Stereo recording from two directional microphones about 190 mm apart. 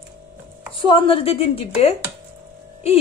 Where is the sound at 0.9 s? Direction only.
30° left (ahead or behind).